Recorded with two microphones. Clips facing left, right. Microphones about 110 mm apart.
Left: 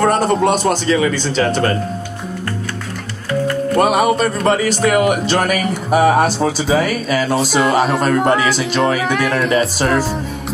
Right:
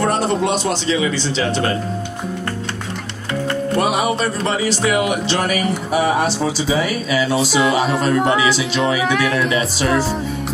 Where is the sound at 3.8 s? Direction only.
50° left (ahead or behind).